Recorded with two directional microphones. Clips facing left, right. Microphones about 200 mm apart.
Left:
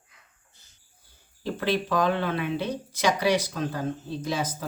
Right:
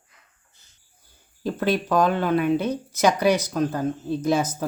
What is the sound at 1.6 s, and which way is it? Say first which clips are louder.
Speech: right 4 dB; 45° right (ahead or behind).